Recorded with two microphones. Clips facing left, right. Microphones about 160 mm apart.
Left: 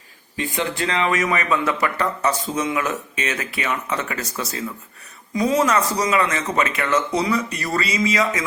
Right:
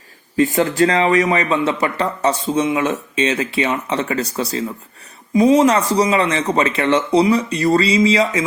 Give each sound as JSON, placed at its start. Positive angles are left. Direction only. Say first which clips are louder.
{"t": 0.3, "sound": "speech", "louder": "right 10 dB", "side_deg": -40}